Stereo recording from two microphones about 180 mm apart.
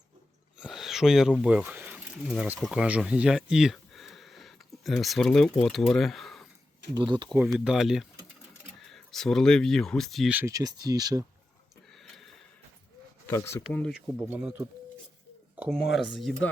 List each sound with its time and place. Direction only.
0.6 s speech: 5° right (ahead or behind)
6.9 s speech: 25° right (ahead or behind)
7.3 s speech: 5° right (ahead or behind); by 11.3 s 20° right (ahead or behind)
13.2 s speech: 15° left (ahead or behind)
13.9 s speech: 5° right (ahead or behind)
15.7 s speech: centre (ahead or behind)